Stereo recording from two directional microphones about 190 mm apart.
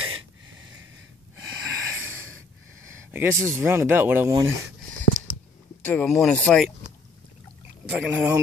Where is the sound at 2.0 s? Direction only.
90° right.